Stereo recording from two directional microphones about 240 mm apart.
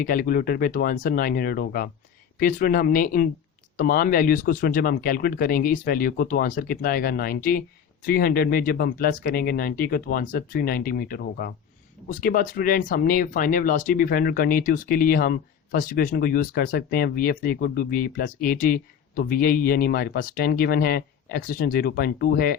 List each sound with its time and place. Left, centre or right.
0.0 s speech: left